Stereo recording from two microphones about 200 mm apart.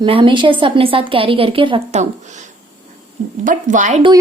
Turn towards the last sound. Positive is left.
turn(degrees=-35)  # may be behind; listen again after turning